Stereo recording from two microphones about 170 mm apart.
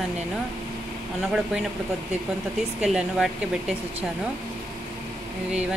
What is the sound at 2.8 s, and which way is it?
Speech, 5° right (ahead or behind).